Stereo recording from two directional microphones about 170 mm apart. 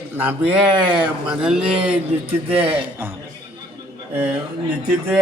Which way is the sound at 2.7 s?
10° right (ahead or behind).